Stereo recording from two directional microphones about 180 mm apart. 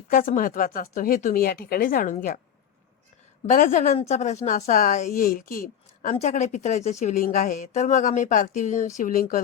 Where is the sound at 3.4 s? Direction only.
45° left (ahead or behind).